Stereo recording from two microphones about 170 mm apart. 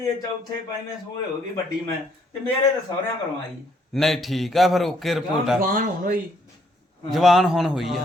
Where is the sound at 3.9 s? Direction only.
Centre (ahead or behind).